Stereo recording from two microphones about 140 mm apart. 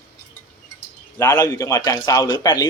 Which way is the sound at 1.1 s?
25° left (ahead or behind).